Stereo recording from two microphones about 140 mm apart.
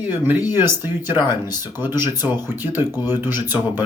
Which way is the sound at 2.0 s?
30° left (ahead or behind).